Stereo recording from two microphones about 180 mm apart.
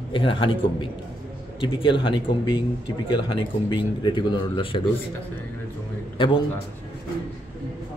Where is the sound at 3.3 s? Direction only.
25° left (ahead or behind).